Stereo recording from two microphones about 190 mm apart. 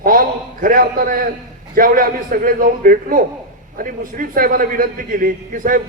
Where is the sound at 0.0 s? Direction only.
45° right (ahead or behind).